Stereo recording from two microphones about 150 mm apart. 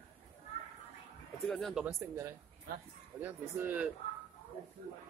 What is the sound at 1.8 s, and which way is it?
Speech, 15° right (ahead or behind).